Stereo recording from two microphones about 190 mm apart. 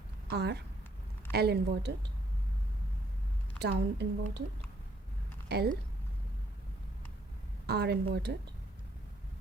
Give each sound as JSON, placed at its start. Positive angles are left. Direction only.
{"t": 0.3, "sound": "a woman's voice", "side_deg": -60}
{"t": 3.6, "sound": "a woman's voice", "side_deg": -60}
{"t": 5.5, "sound": "speech", "side_deg": -60}
{"t": 7.7, "sound": "a woman's voice", "side_deg": -60}